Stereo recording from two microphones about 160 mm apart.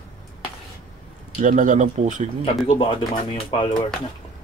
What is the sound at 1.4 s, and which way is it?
Speech, 55° right (ahead or behind).